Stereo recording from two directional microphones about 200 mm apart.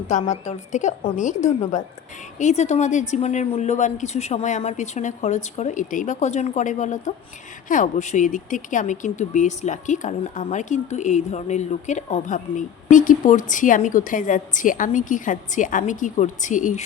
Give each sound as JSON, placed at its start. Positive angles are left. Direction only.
{"t": 0.1, "sound": "speech", "side_deg": 35}
{"t": 2.4, "sound": "speech", "side_deg": 35}